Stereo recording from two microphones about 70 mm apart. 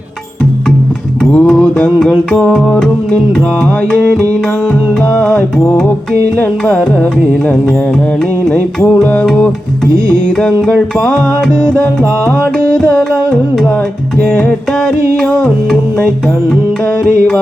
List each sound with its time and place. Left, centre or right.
1.3 s music: centre
5.1 s music: centre
6.3 s music: left
9.2 s music: centre
12.8 s music: left